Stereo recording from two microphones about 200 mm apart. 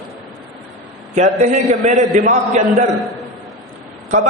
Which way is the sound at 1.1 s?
40° right (ahead or behind).